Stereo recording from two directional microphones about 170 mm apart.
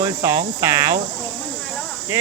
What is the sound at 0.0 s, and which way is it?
Speech, 20° right (ahead or behind).